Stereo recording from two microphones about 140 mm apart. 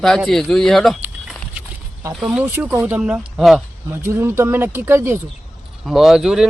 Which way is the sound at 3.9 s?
15° right (ahead or behind).